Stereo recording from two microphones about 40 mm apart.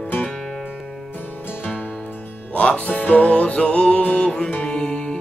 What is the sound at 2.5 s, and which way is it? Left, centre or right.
Music, left.